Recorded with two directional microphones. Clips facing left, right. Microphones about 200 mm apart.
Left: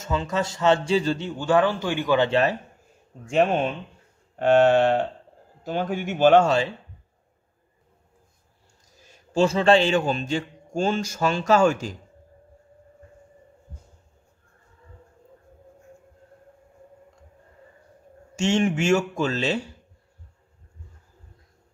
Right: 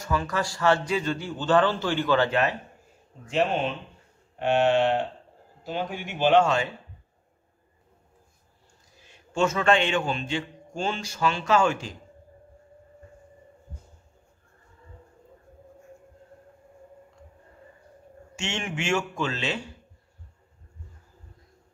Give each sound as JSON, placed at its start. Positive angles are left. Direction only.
{"t": 0.0, "sound": "a man's voice", "side_deg": 20}
{"t": 1.3, "sound": "a man's voice", "side_deg": 10}
{"t": 3.3, "sound": "a man's voice", "side_deg": 50}
{"t": 9.0, "sound": "a man's voice", "side_deg": 35}
{"t": 18.3, "sound": "a man's voice", "side_deg": 40}